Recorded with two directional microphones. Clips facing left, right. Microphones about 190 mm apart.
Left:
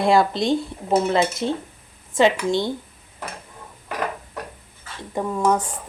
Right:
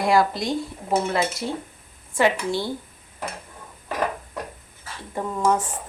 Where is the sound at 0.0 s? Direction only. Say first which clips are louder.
Left 2 dB; 25° left (ahead or behind).